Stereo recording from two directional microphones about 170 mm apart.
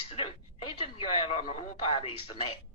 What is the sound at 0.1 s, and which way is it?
Speech, 30° left (ahead or behind).